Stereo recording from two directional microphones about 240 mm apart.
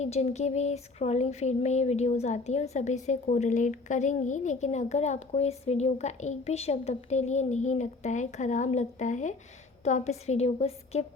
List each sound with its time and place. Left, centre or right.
0.0 s speech: left